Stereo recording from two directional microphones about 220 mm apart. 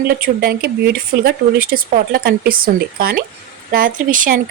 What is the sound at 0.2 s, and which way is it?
A woman's voice, 45° right (ahead or behind).